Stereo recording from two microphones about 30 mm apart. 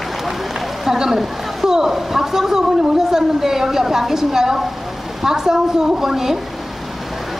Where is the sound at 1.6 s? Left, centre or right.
Centre.